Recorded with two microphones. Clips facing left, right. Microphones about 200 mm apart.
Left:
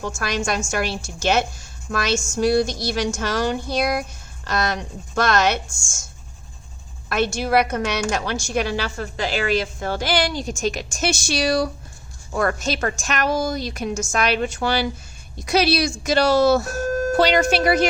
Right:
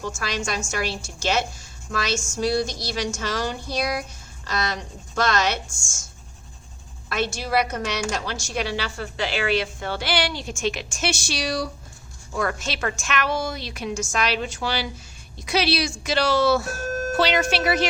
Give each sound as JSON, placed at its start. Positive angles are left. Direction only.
{"t": 0.0, "sound": "a woman's voice", "side_deg": 55}
{"t": 7.1, "sound": "a woman's voice", "side_deg": 55}